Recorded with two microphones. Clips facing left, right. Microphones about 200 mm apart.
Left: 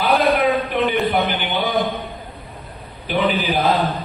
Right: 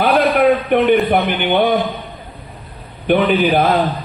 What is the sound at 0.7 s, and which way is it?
Speech, 60° right (ahead or behind).